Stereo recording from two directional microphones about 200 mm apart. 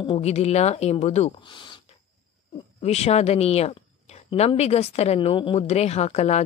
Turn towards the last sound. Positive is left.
turn(degrees=30)  # may be behind; listen again after turning